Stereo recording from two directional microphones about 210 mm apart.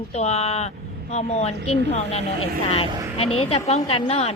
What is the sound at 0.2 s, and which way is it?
A woman's voice, 30° left (ahead or behind).